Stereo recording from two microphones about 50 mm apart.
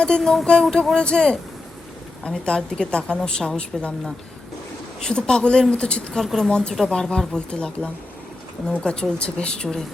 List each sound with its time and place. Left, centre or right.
0.2 s a woman's voice: centre
0.4 s a woman's voice: centre
5.0 s a woman's voice: centre
6.1 s a woman's voice: centre
6.8 s a woman's voice: centre